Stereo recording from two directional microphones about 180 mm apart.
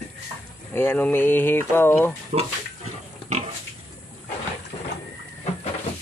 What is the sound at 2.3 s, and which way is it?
Speech, 40° right (ahead or behind).